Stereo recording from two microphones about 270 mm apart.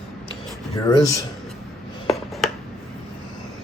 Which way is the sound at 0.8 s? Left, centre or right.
Centre.